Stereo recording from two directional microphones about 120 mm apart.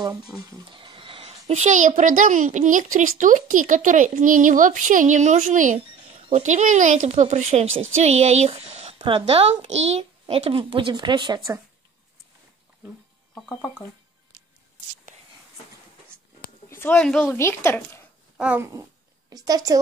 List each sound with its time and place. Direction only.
0.5 s a child's voice: 40° right (ahead or behind); by 6.2 s 90° right
6.2 s a woman's voice: 70° right (ahead or behind)
8.9 s a sound: 45° right (ahead or behind)
9.2 s a child's voice: 60° right (ahead or behind)
10.2 s a woman's voice: 50° right (ahead or behind)
13.3 s speech: 10° left (ahead or behind)
16.6 s a sound: 20° left (ahead or behind)
17.0 s speech: 5° left (ahead or behind)
17.3 s a woman's voice: 20° left (ahead or behind)
18.6 s speech: 25° right (ahead or behind)